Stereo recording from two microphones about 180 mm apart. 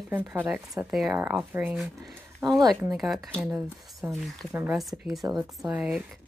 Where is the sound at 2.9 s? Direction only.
Centre (ahead or behind).